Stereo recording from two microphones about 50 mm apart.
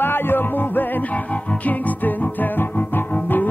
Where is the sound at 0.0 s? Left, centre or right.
Left.